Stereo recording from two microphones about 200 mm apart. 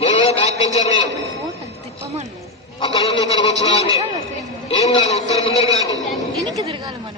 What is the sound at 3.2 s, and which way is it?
Speech, 15° right (ahead or behind).